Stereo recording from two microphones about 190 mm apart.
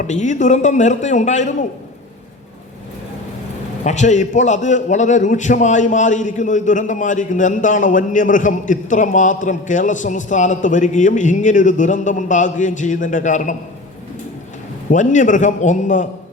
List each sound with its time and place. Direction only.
0.0 s a man's voice: 40° left (ahead or behind)
3.8 s a man's voice: 40° left (ahead or behind)
14.8 s a man's voice: 40° left (ahead or behind)